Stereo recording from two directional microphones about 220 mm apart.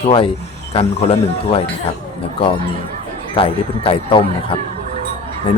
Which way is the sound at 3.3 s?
25° left (ahead or behind).